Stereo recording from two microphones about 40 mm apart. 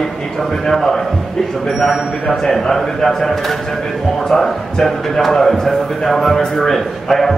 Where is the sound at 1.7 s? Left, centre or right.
Centre.